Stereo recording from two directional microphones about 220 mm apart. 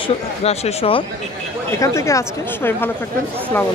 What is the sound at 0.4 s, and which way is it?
Speech, 25° left (ahead or behind).